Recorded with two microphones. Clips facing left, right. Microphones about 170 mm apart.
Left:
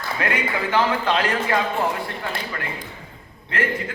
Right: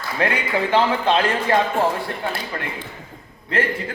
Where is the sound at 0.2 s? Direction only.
30° right (ahead or behind).